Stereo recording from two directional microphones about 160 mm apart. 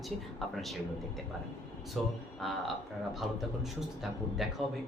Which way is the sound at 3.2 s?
Centre (ahead or behind).